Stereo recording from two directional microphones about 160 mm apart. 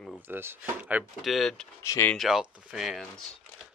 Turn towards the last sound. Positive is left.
turn(degrees=0)  # may be behind; listen again after turning